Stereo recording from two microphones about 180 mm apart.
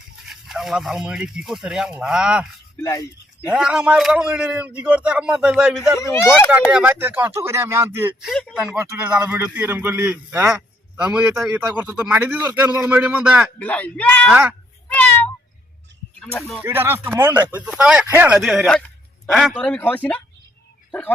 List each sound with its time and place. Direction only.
0.4 s a man's voice: centre (ahead or behind)
2.8 s speech: 15° left (ahead or behind)
3.5 s a man's voice: 5° right (ahead or behind)
6.0 s speech: 15° left (ahead or behind)
6.5 s a man's voice: 5° right (ahead or behind)
8.3 s a man's voice: 5° left (ahead or behind)
8.6 s a man's voice: 10° right (ahead or behind)
13.6 s speech: 10° left (ahead or behind)
14.3 s a man's voice: 10° right (ahead or behind)
16.2 s a man's voice: 5° left (ahead or behind)
16.6 s a man's voice: 10° right (ahead or behind); by 20.2 s 10° left (ahead or behind)